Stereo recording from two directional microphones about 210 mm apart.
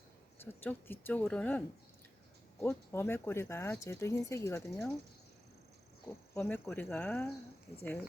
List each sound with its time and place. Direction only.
0.4 s speech: 10° left (ahead or behind)
6.3 s speech: 10° left (ahead or behind)